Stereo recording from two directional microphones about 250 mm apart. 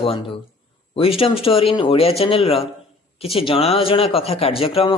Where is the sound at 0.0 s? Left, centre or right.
Left.